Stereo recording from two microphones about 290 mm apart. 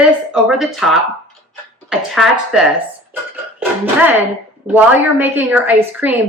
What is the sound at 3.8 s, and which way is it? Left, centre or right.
A woman's voice, centre.